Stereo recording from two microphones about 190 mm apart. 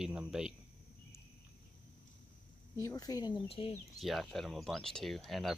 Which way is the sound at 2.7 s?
20° left (ahead or behind).